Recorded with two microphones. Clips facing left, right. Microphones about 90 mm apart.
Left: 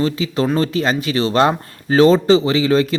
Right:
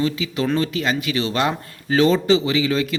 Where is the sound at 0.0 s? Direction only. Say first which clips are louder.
Left 3 dB; 35° left (ahead or behind).